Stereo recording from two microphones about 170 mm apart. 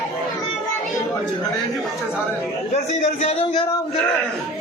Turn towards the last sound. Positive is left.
turn(degrees=40)  # may be behind; listen again after turning